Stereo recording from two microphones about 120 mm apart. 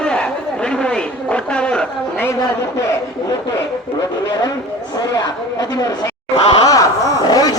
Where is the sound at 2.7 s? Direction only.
25° left (ahead or behind).